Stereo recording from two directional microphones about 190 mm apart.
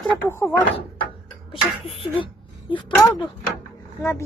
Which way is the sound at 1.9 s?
30° left (ahead or behind).